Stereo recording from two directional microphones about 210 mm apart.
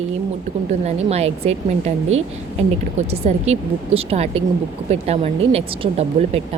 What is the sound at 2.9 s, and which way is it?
Speech, 30° right (ahead or behind).